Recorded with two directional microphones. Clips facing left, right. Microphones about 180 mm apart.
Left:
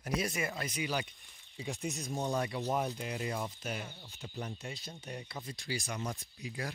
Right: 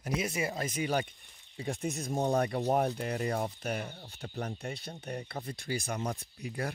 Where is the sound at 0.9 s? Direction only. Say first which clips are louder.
Right 5 dB; 50° right (ahead or behind).